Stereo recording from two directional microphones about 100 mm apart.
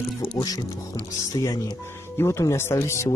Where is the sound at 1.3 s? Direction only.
35° left (ahead or behind).